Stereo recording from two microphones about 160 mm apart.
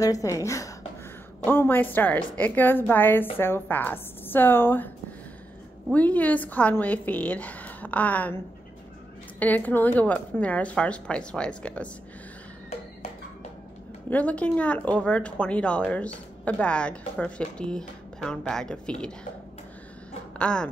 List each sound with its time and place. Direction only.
0.0 s a woman's voice: 20° left (ahead or behind)
9.4 s speech: 10° left (ahead or behind)
14.1 s speech: 10° left (ahead or behind)
20.3 s a sound: 5° left (ahead or behind)